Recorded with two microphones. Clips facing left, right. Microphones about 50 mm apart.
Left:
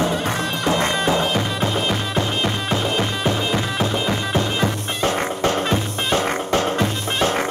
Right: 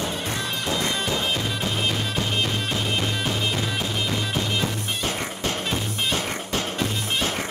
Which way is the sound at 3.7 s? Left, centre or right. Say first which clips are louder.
Left 5 dB; left.